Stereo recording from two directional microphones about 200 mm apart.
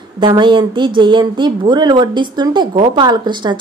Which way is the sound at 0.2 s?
25° right (ahead or behind).